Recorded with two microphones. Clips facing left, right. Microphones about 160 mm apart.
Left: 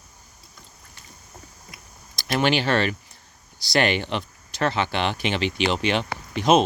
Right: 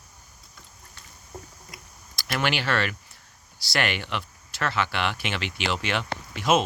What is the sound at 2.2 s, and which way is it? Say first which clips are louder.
Speech: left 5 dB; 25° left (ahead or behind).